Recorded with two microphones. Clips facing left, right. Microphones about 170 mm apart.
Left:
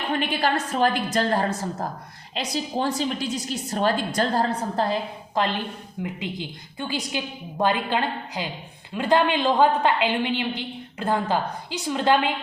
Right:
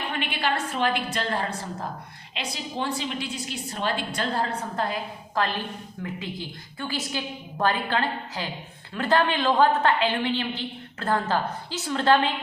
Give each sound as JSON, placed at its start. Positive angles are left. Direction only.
{"t": 0.1, "sound": "a woman's voice", "side_deg": 40}